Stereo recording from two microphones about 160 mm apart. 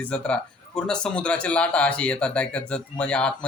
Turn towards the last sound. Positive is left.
turn(degrees=5)  # may be behind; listen again after turning